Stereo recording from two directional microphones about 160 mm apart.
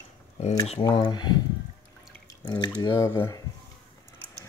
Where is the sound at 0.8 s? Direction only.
25° left (ahead or behind).